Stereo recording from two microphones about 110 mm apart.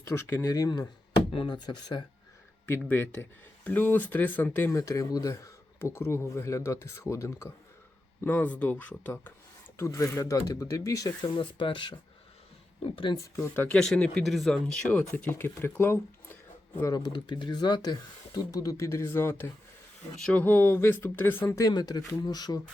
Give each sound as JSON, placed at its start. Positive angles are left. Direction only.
{"t": 0.0, "sound": "speech", "side_deg": 25}
{"t": 0.5, "sound": "speech", "side_deg": 35}
{"t": 1.3, "sound": "speech", "side_deg": 45}
{"t": 2.6, "sound": "speech", "side_deg": 20}
{"t": 4.8, "sound": "speech", "side_deg": 30}
{"t": 9.7, "sound": "speech", "side_deg": 25}
{"t": 11.3, "sound": "speech", "side_deg": 50}
{"t": 13.3, "sound": "speech", "side_deg": 20}
{"t": 13.7, "sound": "speech", "side_deg": 5}
{"t": 16.9, "sound": "speech", "side_deg": 40}
{"t": 21.6, "sound": "speech", "side_deg": 35}